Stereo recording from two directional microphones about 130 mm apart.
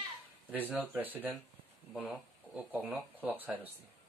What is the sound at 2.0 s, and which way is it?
Speech, 10° right (ahead or behind).